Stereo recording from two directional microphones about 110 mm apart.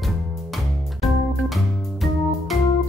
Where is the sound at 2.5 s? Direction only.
Centre (ahead or behind).